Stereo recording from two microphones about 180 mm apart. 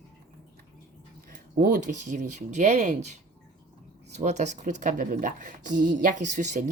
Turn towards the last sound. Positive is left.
turn(degrees=-40)  # may be behind; listen again after turning